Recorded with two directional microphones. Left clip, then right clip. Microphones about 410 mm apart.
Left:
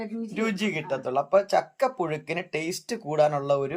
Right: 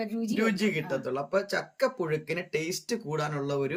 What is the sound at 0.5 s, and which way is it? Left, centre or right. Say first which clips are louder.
Speech: left 1 dB; centre.